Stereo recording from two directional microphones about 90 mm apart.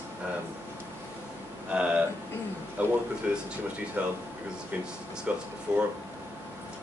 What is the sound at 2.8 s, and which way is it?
A man's voice, 15° right (ahead or behind).